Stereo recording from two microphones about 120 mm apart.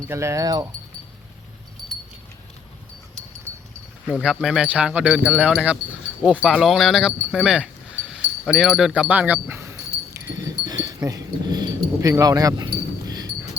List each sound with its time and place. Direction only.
0.1 s speech: 25° right (ahead or behind)
4.1 s speech: 5° right (ahead or behind)
10.4 s dog: 35° right (ahead or behind)